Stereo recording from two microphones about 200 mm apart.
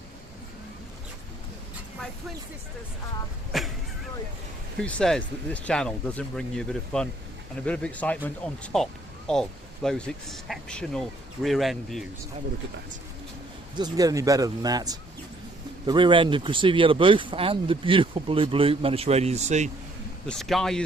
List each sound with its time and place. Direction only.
3.5 s speech: centre (ahead or behind)
4.8 s speech: 5° left (ahead or behind)
13.7 s speech: 20° right (ahead or behind); by 19.7 s 35° right (ahead or behind)
20.2 s speech: centre (ahead or behind)